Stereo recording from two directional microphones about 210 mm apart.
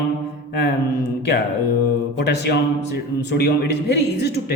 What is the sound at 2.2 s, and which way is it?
A man's voice, 55° left (ahead or behind).